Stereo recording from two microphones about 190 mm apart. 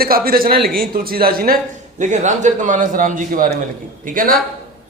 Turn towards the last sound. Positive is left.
turn(degrees=-45)  # may be behind; listen again after turning